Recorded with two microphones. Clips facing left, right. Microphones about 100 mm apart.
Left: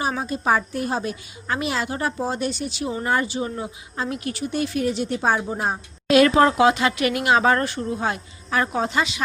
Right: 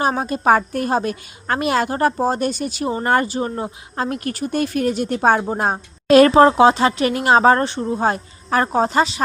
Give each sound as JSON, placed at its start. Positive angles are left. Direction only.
{"t": 0.0, "sound": "a woman's voice", "side_deg": -55}